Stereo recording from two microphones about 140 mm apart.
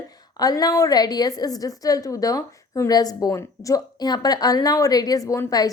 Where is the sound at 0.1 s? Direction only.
25° left (ahead or behind).